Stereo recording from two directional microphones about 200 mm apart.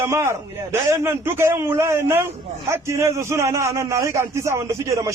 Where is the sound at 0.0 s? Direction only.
15° right (ahead or behind).